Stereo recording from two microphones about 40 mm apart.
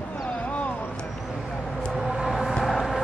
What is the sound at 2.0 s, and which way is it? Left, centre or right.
Vehicle, centre.